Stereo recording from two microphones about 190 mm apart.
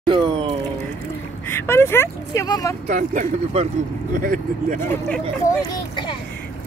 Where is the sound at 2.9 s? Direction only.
40° right (ahead or behind).